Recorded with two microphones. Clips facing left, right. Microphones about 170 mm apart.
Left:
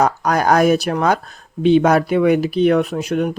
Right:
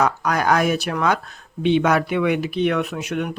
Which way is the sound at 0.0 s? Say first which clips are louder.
Left 4 dB; 40° left (ahead or behind).